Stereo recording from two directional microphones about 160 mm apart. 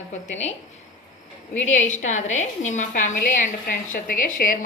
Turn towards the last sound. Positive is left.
turn(degrees=60)  # may be behind; listen again after turning